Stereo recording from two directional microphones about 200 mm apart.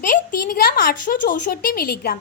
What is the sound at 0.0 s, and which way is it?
A woman's voice, 40° left (ahead or behind).